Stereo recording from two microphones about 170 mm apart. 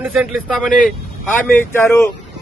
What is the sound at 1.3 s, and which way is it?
Speech, 10° left (ahead or behind).